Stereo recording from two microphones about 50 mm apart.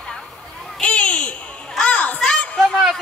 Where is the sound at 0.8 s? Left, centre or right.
Left.